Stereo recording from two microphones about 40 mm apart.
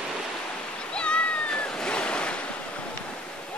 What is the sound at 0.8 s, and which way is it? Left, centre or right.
Waves, left.